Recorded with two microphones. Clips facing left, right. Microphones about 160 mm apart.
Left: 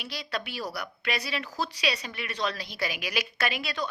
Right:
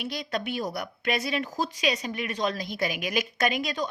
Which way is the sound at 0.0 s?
50° right (ahead or behind).